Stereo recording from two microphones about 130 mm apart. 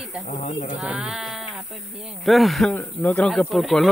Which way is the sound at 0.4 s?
60° left (ahead or behind).